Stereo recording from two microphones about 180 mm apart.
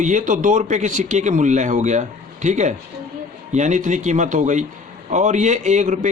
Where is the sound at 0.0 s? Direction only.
45° right (ahead or behind).